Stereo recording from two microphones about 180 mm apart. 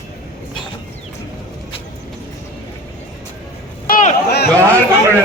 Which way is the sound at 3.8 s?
50° left (ahead or behind).